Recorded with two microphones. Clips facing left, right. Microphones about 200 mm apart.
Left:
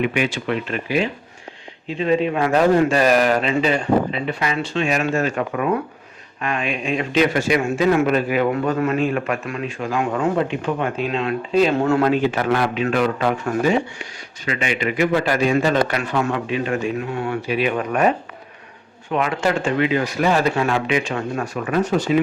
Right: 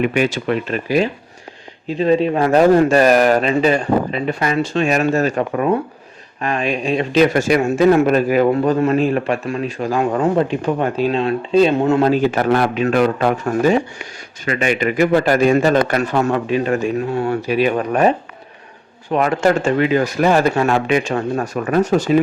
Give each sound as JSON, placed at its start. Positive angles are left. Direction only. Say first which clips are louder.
{"t": 0.0, "sound": "a man's voice", "louder": "right 4 dB", "side_deg": -40}
{"t": 12.0, "sound": "a man's voice", "louder": "right 3 dB", "side_deg": -40}
{"t": 19.1, "sound": "a man's voice", "louder": "right 5 dB", "side_deg": -45}